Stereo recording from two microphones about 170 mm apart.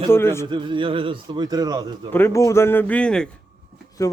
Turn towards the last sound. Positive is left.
turn(degrees=20)  # may be behind; listen again after turning